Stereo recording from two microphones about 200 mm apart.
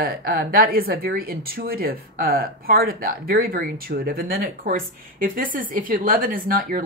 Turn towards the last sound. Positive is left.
turn(degrees=-45)  # may be behind; listen again after turning